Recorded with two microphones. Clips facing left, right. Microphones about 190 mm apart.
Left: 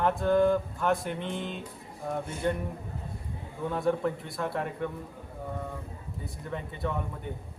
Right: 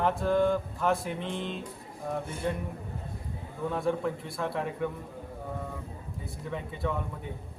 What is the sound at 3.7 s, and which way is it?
Mantra, centre (ahead or behind).